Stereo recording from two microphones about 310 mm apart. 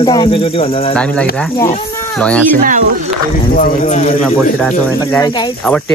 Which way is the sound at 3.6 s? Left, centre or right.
Left.